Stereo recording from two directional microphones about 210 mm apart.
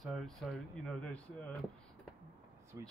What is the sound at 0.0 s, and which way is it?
Speech, centre (ahead or behind).